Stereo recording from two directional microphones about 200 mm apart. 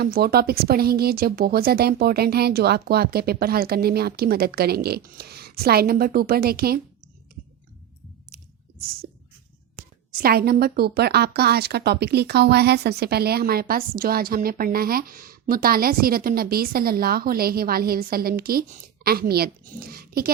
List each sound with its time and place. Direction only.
0.0 s a woman's voice: 50° right (ahead or behind)
8.3 s squish: 50° right (ahead or behind)
10.2 s a woman's voice: 50° right (ahead or behind)